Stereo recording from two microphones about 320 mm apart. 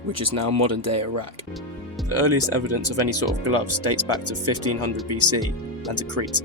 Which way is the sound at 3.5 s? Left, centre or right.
Right.